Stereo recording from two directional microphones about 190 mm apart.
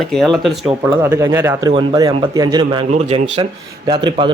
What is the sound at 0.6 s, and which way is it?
Speech, 15° right (ahead or behind).